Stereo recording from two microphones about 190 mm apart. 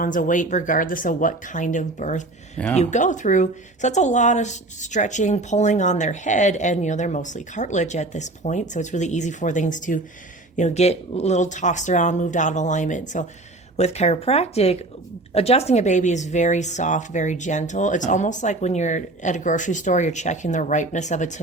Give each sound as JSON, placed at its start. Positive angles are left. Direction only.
{"t": 0.0, "sound": "speech", "side_deg": 45}